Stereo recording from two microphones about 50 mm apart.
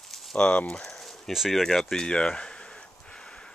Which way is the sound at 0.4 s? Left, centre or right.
Left.